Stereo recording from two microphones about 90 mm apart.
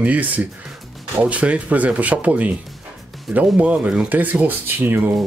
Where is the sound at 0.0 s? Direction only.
15° right (ahead or behind).